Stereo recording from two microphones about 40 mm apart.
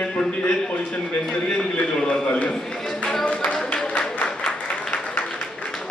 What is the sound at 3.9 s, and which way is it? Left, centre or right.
Applause, left.